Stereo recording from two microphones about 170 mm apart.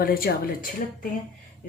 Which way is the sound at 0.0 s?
60° left (ahead or behind).